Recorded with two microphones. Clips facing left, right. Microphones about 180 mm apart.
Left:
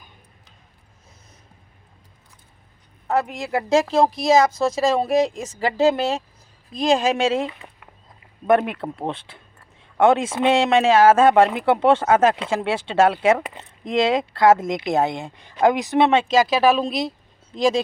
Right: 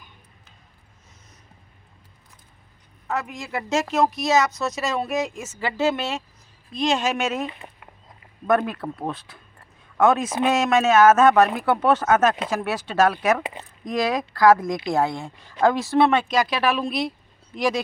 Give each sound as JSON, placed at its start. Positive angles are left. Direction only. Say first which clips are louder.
{"t": 3.1, "sound": "a woman's voice", "louder": "left 6 dB", "side_deg": 35}